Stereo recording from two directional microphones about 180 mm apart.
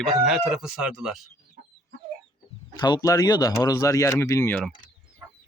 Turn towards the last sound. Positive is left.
turn(degrees=10)  # may be behind; listen again after turning